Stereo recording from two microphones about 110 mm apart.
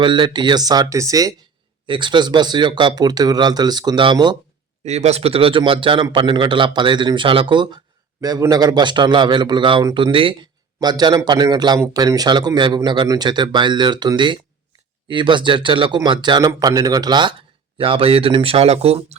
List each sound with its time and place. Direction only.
0.0 s speech: 45° right (ahead or behind); by 1.3 s 30° right (ahead or behind)
1.9 s speech: 45° right (ahead or behind)
4.9 s a man's voice: 80° right; by 7.8 s 45° right (ahead or behind)
8.2 s a man's voice: 35° right (ahead or behind); by 10.3 s 55° right (ahead or behind)
10.8 s a man's voice: 40° right (ahead or behind)
17.7 s speech: 55° right (ahead or behind)
18.5 s speech: 65° right (ahead or behind)